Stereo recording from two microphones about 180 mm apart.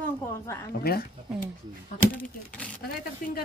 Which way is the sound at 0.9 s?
60° left (ahead or behind).